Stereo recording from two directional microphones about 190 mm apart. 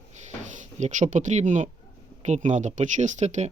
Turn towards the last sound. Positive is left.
turn(degrees=-40)  # may be behind; listen again after turning